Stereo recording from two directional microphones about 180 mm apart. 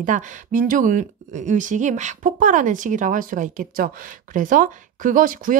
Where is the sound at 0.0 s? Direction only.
45° right (ahead or behind).